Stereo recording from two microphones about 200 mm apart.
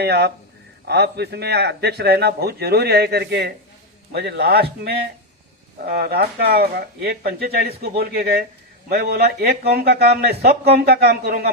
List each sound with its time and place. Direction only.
0.0 s a man's voice: 55° right (ahead or behind)
5.8 s speech: 50° right (ahead or behind)